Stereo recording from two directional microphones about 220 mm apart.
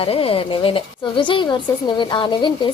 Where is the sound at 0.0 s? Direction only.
25° left (ahead or behind).